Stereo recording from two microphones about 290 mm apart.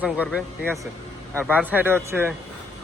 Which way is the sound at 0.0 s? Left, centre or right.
Centre.